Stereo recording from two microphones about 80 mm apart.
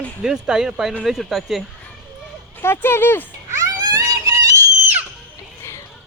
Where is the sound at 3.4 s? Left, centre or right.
Right.